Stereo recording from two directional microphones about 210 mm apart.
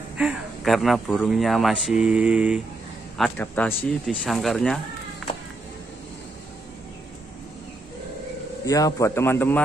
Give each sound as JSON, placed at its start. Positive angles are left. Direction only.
{"t": 0.2, "sound": "speech", "side_deg": 0}
{"t": 3.2, "sound": "speech", "side_deg": 10}
{"t": 8.6, "sound": "a man's voice", "side_deg": 15}